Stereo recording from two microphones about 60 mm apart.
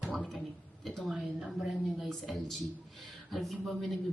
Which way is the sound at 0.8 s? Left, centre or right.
Centre.